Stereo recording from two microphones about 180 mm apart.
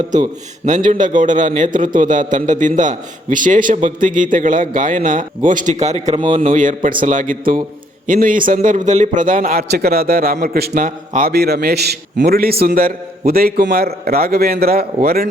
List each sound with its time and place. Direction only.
0.6 s a man's voice: 45° right (ahead or behind)